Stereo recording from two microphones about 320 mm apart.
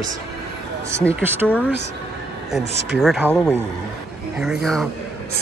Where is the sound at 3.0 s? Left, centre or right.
Centre.